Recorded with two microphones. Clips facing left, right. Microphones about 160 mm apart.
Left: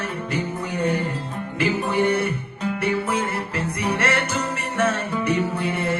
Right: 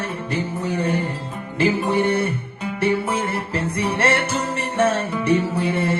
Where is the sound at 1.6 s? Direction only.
30° right (ahead or behind).